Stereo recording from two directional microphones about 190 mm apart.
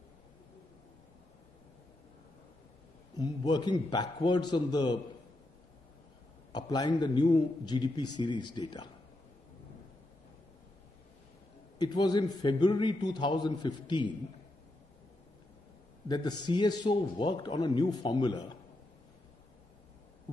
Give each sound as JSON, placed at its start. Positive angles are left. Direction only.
{"t": 3.2, "sound": "a man's voice", "side_deg": 20}
{"t": 6.5, "sound": "a man's voice", "side_deg": 20}
{"t": 11.8, "sound": "a man's voice", "side_deg": 20}
{"t": 16.1, "sound": "a man's voice", "side_deg": 20}